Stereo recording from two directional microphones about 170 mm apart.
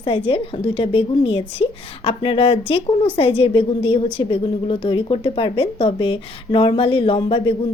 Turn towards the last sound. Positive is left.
turn(degrees=30)  # may be behind; listen again after turning